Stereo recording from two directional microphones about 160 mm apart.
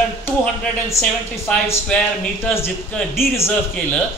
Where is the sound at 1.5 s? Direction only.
5° left (ahead or behind).